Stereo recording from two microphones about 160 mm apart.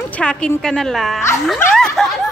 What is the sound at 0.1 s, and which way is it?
Speech, 5° left (ahead or behind).